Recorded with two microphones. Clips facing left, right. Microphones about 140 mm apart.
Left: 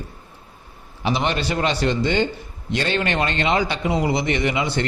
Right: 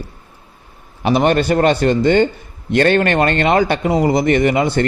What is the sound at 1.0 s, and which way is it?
A man's voice, 50° right (ahead or behind).